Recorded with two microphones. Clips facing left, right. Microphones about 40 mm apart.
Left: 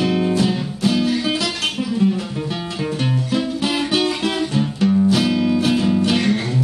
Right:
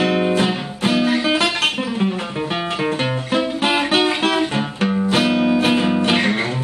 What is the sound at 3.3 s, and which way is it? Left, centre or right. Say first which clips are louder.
Music: right 4 dB; right.